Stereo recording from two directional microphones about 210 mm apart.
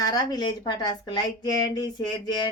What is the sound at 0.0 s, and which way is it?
A woman's voice, 20° left (ahead or behind).